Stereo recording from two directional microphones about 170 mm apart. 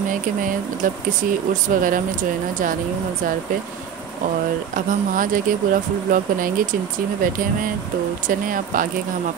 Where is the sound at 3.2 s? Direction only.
55° right (ahead or behind).